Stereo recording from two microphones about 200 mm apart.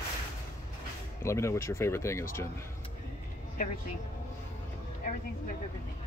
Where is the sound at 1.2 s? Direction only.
15° left (ahead or behind).